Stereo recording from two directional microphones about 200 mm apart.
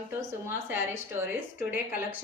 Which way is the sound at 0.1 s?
10° right (ahead or behind).